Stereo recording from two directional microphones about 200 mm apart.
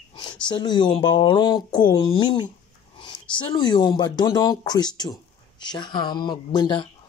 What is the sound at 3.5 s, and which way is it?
Speech, 20° left (ahead or behind).